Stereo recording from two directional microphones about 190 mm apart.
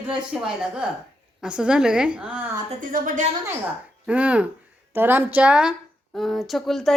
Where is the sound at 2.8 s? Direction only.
45° right (ahead or behind).